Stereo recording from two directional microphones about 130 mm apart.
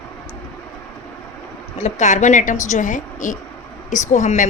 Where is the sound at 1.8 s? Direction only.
65° left (ahead or behind).